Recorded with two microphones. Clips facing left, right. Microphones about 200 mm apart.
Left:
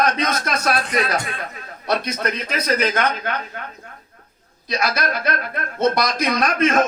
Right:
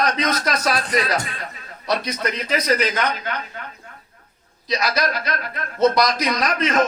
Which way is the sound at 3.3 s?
55° left (ahead or behind).